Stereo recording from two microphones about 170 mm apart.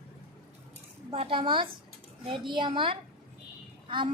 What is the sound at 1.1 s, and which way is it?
A woman's voice, 35° right (ahead or behind).